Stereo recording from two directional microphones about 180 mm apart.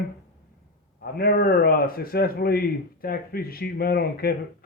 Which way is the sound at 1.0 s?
55° left (ahead or behind).